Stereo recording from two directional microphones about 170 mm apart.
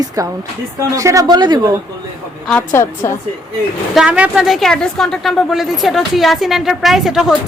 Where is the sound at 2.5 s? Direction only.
5° left (ahead or behind).